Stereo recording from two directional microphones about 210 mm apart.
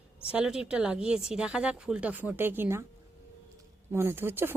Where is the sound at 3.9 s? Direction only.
10° right (ahead or behind).